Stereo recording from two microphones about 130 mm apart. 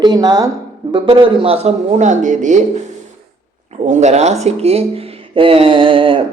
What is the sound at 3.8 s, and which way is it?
Speech, 60° right (ahead or behind).